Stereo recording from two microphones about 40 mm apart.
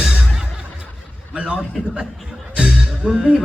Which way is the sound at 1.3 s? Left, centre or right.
Right.